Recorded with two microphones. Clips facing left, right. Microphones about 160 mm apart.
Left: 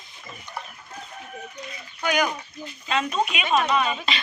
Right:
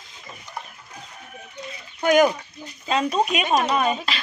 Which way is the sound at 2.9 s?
35° right (ahead or behind).